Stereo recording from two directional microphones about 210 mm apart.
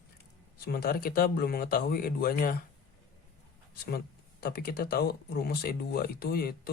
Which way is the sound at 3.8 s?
45° left (ahead or behind).